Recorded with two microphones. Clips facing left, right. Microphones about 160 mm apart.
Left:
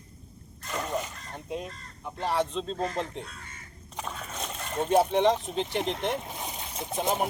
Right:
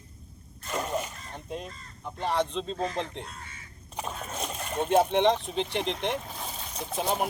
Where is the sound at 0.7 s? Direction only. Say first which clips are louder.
Right 1 dB; 20° right (ahead or behind).